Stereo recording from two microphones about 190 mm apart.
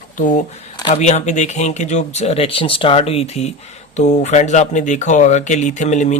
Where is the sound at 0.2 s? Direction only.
40° left (ahead or behind).